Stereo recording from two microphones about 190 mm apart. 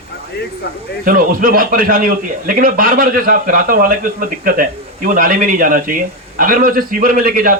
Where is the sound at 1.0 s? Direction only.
50° right (ahead or behind).